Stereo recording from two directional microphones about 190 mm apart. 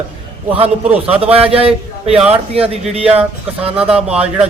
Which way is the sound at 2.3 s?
30° right (ahead or behind).